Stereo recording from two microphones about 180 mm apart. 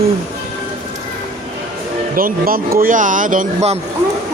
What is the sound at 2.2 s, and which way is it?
Speech, 50° right (ahead or behind).